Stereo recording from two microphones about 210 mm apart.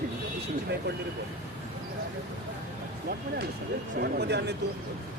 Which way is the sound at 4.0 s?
50° right (ahead or behind).